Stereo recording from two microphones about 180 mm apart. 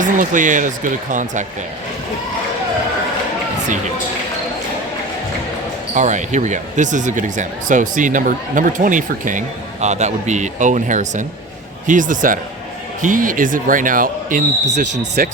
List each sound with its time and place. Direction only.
0.0 s speech: 45° right (ahead or behind)
5.9 s speech: 45° right (ahead or behind)